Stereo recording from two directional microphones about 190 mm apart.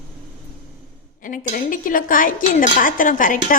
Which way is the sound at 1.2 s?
45° left (ahead or behind).